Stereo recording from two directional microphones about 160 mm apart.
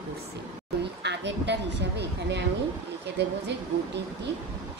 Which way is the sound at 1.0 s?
90° right.